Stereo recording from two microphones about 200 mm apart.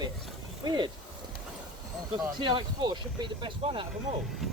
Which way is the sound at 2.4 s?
25° right (ahead or behind).